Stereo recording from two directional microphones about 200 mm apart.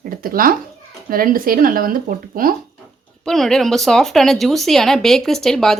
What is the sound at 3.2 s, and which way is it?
Speech, centre (ahead or behind).